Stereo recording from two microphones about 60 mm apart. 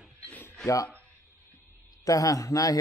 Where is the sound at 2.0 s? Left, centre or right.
Left.